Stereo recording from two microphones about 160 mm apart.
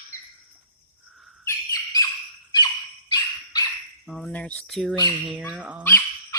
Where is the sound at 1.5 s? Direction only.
20° left (ahead or behind).